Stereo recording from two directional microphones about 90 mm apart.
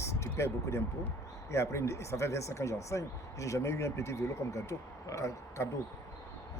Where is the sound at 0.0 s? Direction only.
30° left (ahead or behind).